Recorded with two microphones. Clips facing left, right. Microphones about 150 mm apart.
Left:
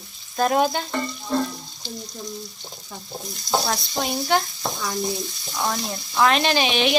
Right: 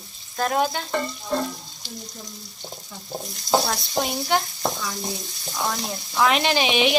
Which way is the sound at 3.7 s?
5° right (ahead or behind).